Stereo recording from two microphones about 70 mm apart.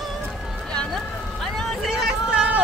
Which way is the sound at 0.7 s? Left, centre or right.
Centre.